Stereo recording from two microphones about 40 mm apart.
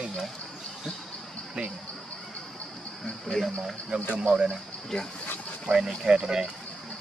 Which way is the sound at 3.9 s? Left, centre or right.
Right.